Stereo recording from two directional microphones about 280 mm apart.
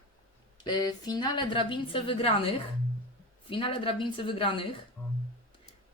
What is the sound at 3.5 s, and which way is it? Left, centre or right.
A woman's voice, centre.